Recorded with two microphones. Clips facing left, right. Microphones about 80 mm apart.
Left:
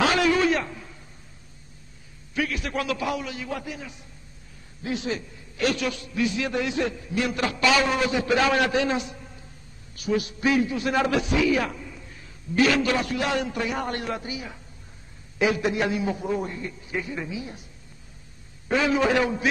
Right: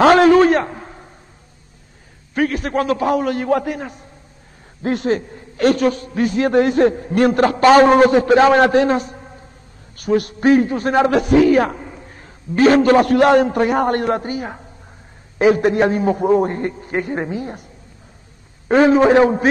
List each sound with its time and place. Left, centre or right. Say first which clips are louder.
0.0 s a sound: right 11 dB; right
2.3 s a man's voice: right 9 dB; right
18.7 s a man's voice: right 10 dB; right